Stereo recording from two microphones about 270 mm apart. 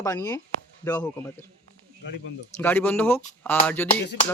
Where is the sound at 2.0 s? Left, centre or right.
Left.